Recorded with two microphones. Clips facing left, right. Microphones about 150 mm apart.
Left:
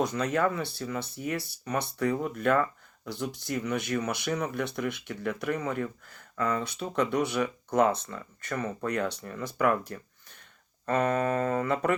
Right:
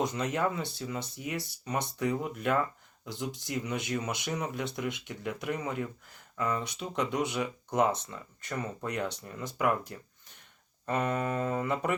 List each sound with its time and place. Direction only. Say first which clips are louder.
0.0 s speech: left 3 dB; 20° right (ahead or behind)